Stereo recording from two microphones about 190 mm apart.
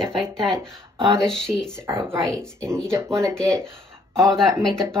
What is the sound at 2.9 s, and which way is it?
Speech, 15° right (ahead or behind).